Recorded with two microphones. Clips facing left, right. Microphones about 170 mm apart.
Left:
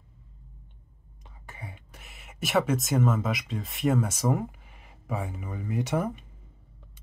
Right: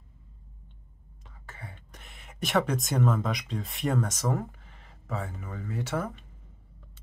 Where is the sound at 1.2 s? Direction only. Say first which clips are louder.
Left 2 dB; 15° left (ahead or behind).